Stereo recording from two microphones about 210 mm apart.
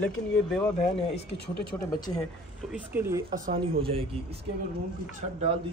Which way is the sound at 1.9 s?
20° left (ahead or behind).